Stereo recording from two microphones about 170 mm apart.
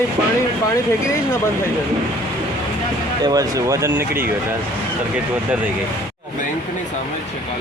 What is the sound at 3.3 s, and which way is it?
Speech, 20° right (ahead or behind).